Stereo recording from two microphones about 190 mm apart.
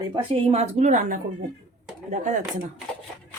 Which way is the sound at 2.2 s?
45° right (ahead or behind).